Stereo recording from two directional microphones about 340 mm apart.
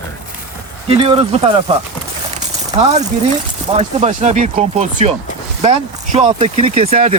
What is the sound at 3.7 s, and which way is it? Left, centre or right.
Speech, centre.